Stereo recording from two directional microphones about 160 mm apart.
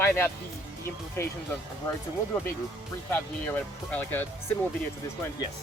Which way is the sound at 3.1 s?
10° left (ahead or behind).